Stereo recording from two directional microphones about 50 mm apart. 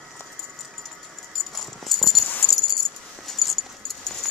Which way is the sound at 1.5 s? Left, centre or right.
Centre.